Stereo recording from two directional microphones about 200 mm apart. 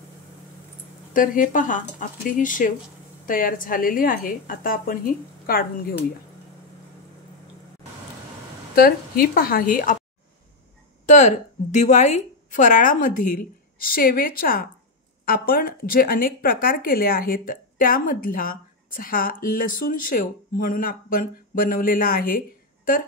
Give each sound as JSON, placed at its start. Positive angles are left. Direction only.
{"t": 1.1, "sound": "a woman's voice", "side_deg": 45}
{"t": 8.7, "sound": "speech", "side_deg": 45}
{"t": 11.1, "sound": "a woman's voice", "side_deg": 35}